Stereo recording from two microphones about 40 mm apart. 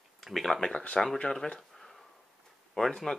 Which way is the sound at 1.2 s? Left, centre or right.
Centre.